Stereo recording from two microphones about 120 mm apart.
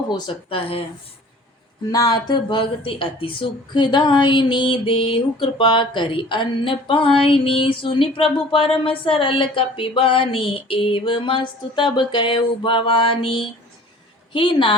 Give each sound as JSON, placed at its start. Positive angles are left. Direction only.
{"t": 0.5, "sound": "a woman's voice", "side_deg": 50}
{"t": 1.9, "sound": "a woman's voice", "side_deg": 35}